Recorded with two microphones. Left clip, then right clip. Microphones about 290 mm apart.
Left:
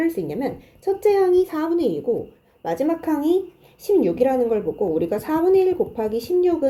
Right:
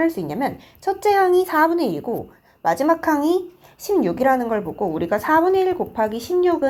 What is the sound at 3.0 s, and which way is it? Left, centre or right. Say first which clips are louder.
Speech: right 2 dB; centre.